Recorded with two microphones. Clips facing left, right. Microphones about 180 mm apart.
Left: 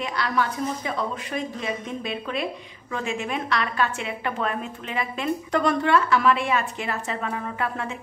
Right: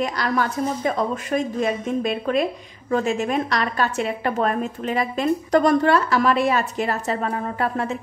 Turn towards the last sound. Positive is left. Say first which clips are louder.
# right 5 dB
turn(degrees=-40)  # may be behind; listen again after turning